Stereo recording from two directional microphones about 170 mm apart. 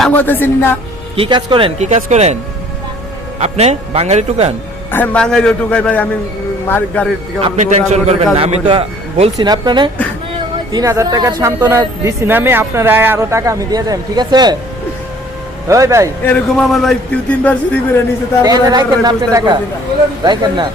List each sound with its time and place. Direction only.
0.0 s a man's voice: 10° left (ahead or behind)
1.1 s a man's voice: 30° right (ahead or behind)
3.4 s a man's voice: 40° right (ahead or behind)
4.9 s a man's voice: 10° left (ahead or behind)
7.4 s a man's voice: 40° right (ahead or behind)
9.5 s speech: 25° right (ahead or behind)
15.6 s speech: 20° right (ahead or behind)
16.2 s a man's voice: 5° left (ahead or behind)
18.4 s speech: 25° right (ahead or behind)